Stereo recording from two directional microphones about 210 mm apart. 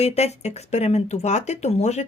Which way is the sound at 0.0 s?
30° left (ahead or behind).